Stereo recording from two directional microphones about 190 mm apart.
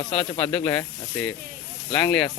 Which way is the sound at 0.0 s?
30° left (ahead or behind).